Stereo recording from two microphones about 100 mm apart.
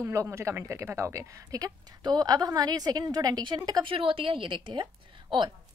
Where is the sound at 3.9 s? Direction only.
60° right (ahead or behind).